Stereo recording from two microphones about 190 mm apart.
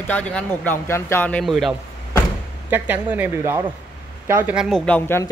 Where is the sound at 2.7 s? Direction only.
10° right (ahead or behind); by 5.2 s 10° left (ahead or behind).